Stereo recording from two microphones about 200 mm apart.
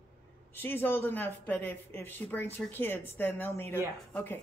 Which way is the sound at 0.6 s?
10° left (ahead or behind).